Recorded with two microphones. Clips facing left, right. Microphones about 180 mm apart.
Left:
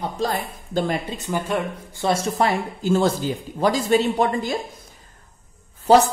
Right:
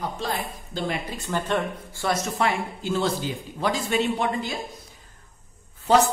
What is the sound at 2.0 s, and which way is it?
Speech, 30° left (ahead or behind).